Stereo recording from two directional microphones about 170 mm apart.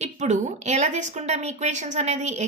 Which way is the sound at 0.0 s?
45° right (ahead or behind).